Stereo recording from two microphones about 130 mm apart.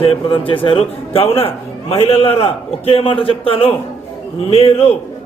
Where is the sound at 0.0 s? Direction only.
45° left (ahead or behind).